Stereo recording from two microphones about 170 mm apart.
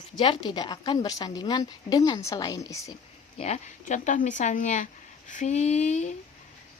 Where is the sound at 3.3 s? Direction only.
40° left (ahead or behind).